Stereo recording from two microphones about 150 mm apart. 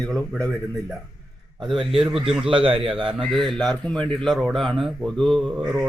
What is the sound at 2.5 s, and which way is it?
Speech, 35° right (ahead or behind).